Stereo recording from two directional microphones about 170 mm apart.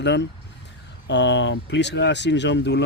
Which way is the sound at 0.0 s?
90° left.